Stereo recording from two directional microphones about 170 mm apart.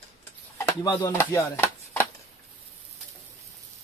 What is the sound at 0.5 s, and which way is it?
Speech, 20° left (ahead or behind).